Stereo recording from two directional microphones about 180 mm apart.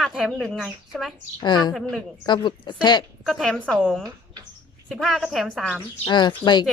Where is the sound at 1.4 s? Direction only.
25° left (ahead or behind).